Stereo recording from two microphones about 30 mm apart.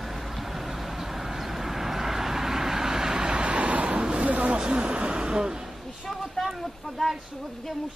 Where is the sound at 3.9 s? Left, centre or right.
Right.